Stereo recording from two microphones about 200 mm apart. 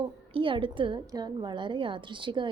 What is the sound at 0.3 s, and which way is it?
A woman's voice, 25° right (ahead or behind).